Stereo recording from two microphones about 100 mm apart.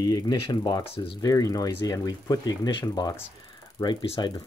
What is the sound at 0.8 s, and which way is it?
Speech, 70° left (ahead or behind).